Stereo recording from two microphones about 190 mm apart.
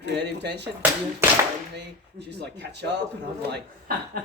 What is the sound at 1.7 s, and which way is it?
Speech, 60° right (ahead or behind).